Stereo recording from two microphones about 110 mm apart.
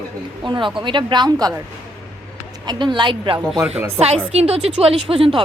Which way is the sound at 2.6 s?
45° right (ahead or behind).